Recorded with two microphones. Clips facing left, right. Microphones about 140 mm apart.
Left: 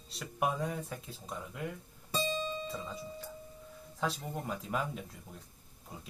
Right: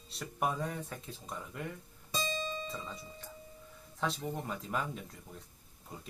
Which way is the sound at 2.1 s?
60° left (ahead or behind).